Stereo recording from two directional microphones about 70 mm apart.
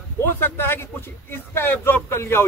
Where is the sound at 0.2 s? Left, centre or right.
Left.